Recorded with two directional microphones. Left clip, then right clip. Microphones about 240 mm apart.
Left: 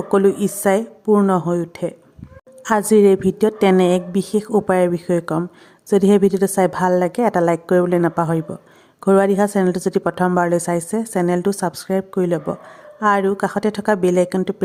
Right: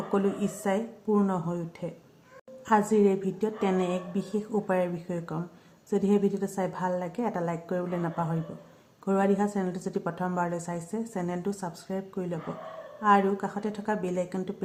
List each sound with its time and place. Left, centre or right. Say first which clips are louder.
0.1 s a woman's voice: left 13 dB; left